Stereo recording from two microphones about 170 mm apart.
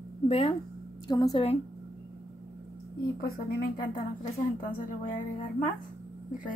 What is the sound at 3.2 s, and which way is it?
Speech, 55° left (ahead or behind).